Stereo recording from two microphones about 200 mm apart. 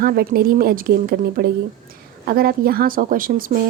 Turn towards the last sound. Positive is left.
turn(degrees=-45)  # may be behind; listen again after turning